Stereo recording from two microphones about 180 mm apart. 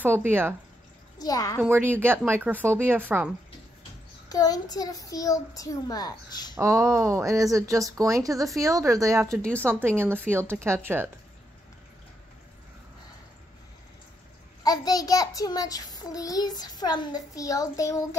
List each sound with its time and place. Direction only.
0.0 s speech: 10° right (ahead or behind)
1.1 s a child's voice: 20° left (ahead or behind)
1.6 s speech: 10° right (ahead or behind)
4.3 s a child's voice: 20° left (ahead or behind)
6.5 s speech: 15° right (ahead or behind)
14.6 s a child's voice: 20° left (ahead or behind)